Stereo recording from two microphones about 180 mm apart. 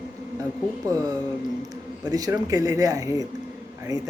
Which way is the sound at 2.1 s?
20° right (ahead or behind).